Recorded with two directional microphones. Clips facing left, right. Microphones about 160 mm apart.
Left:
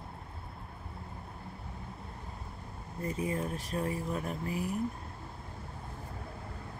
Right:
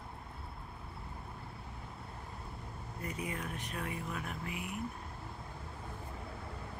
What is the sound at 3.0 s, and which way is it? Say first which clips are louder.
Speech: left 7 dB; 30° left (ahead or behind).